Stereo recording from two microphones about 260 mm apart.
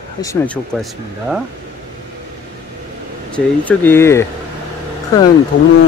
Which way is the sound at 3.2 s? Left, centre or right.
Centre.